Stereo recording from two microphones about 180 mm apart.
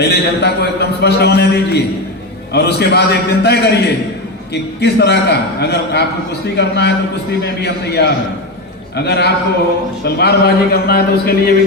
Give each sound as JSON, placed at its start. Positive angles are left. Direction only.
{"t": 0.0, "sound": "a man's voice", "side_deg": 65}